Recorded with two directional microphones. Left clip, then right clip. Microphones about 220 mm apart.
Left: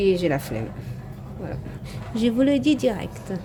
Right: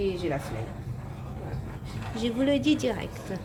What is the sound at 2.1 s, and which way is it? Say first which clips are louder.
Speech: left 5 dB; 30° left (ahead or behind).